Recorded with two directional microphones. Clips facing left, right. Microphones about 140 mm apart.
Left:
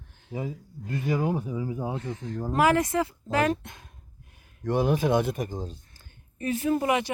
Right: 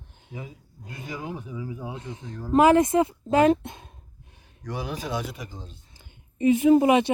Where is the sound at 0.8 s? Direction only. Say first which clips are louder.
Left 9 dB; 15° right (ahead or behind).